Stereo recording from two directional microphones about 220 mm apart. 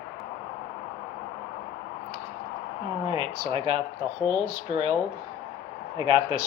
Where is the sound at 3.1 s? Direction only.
25° right (ahead or behind).